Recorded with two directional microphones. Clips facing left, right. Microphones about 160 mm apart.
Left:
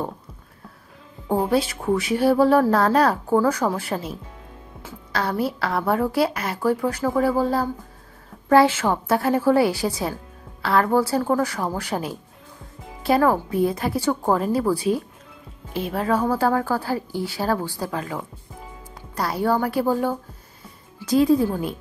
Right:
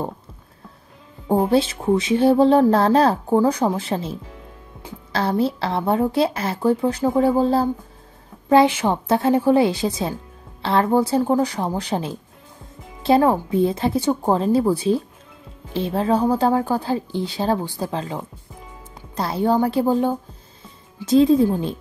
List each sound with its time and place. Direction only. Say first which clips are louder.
1.5 s speech: right 3 dB; 25° right (ahead or behind)